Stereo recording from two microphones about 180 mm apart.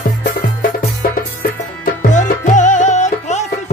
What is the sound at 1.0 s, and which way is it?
Music, 55° left (ahead or behind).